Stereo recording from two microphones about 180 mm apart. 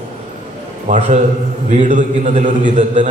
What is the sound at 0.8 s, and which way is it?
A man's voice, 40° right (ahead or behind).